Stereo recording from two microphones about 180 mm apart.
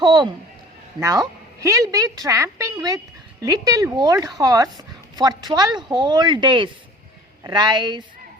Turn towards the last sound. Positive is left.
turn(degrees=-25)  # may be behind; listen again after turning